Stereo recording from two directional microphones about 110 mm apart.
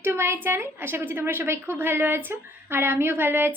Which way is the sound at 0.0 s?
20° right (ahead or behind).